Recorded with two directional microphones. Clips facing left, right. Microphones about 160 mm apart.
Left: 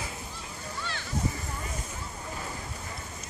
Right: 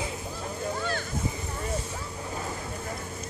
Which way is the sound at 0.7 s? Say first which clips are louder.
Right 7 dB; 45° right (ahead or behind).